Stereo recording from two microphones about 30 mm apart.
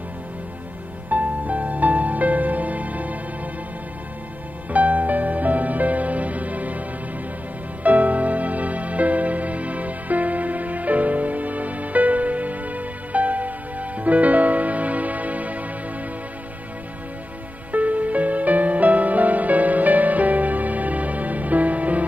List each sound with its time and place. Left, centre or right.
1.1 s music: right
4.7 s music: right
7.8 s music: right
17.6 s music: right